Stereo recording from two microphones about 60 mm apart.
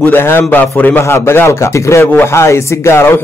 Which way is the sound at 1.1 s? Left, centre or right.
Left.